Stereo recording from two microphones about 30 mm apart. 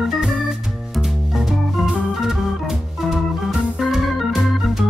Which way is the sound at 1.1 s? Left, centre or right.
Centre.